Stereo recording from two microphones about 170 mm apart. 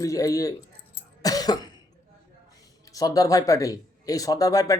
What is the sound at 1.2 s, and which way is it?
Cough, 20° left (ahead or behind).